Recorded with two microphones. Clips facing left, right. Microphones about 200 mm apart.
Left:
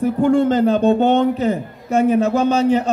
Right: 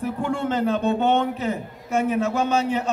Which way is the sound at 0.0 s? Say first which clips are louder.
Left 10 dB; 35° left (ahead or behind).